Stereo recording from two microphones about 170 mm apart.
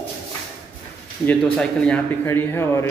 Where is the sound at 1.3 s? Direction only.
5° left (ahead or behind).